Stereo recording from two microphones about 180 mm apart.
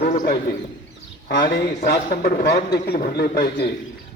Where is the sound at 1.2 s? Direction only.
60° left (ahead or behind).